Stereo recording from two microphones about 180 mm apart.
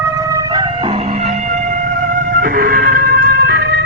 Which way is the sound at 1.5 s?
45° right (ahead or behind).